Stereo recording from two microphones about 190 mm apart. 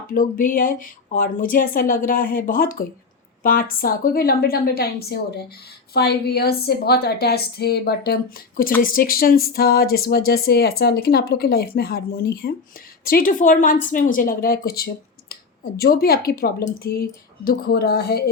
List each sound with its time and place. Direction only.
0.1 s a woman's voice: 45° left (ahead or behind)